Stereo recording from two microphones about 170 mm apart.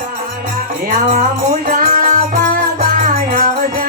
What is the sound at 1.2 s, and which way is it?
Music, 55° right (ahead or behind).